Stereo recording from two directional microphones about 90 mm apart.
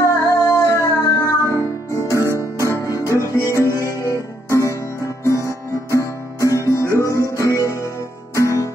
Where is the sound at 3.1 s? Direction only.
35° left (ahead or behind).